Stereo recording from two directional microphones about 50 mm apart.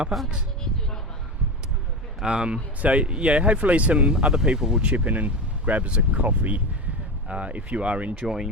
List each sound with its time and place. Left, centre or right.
0.1 s speech: centre
2.2 s speech: centre
4.1 s speech: centre
4.9 s speech: right
8.2 s speech: centre